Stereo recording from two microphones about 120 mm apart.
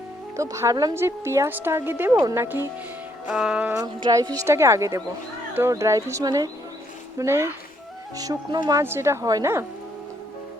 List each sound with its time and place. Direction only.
0.3 s a woman's voice: 25° right (ahead or behind)
3.2 s music: 5° right (ahead or behind)
3.8 s a woman's voice: 30° right (ahead or behind)
8.8 s a woman's voice: 20° right (ahead or behind)